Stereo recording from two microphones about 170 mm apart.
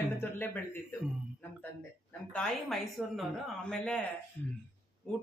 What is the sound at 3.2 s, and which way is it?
Speech, 5° left (ahead or behind).